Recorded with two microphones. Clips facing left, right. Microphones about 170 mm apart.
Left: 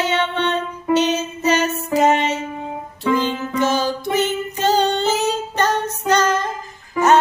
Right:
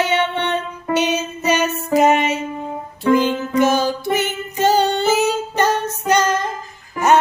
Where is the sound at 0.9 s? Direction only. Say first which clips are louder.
Left 1 dB; 10° right (ahead or behind).